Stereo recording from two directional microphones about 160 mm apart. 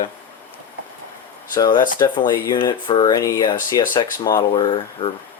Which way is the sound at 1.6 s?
30° left (ahead or behind).